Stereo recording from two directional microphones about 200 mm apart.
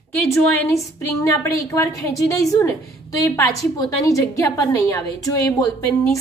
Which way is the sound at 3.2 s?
15° left (ahead or behind).